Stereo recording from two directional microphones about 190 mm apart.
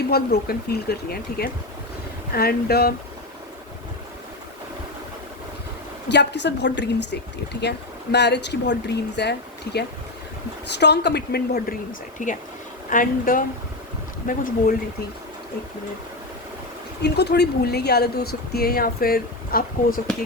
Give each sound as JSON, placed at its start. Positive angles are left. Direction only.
{"t": 0.1, "sound": "speech", "side_deg": 55}
{"t": 6.1, "sound": "speech", "side_deg": 65}
{"t": 10.7, "sound": "speech", "side_deg": 65}
{"t": 12.2, "sound": "speech", "side_deg": 45}
{"t": 17.0, "sound": "speech", "side_deg": 60}